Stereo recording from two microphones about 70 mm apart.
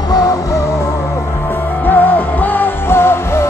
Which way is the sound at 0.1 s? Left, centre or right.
Left.